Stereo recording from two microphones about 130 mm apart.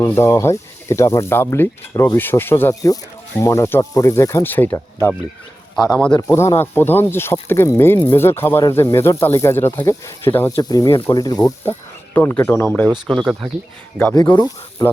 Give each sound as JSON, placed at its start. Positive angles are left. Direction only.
{"t": 0.0, "sound": "speech", "side_deg": 20}
{"t": 6.3, "sound": "speech", "side_deg": 20}
{"t": 10.6, "sound": "speech", "side_deg": 30}
{"t": 12.1, "sound": "speech", "side_deg": 10}
{"t": 14.3, "sound": "speech", "side_deg": 30}